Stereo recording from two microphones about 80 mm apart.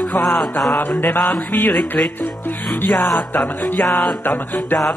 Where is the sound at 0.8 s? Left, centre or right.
Left.